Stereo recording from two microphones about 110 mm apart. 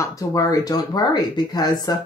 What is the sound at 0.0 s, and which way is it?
Speech, 30° left (ahead or behind).